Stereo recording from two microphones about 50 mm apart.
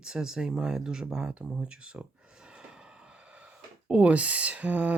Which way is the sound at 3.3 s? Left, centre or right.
Right.